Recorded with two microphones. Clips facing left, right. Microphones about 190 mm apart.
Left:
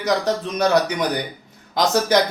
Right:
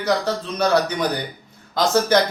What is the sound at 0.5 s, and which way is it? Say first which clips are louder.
Speech: even; 15° left (ahead or behind).